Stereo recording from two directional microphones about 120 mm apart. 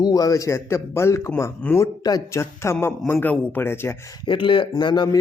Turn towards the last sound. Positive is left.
turn(degrees=35)  # may be behind; listen again after turning